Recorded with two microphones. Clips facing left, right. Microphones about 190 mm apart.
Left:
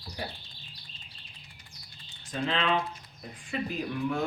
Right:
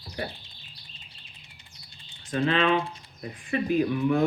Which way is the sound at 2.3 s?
60° right (ahead or behind).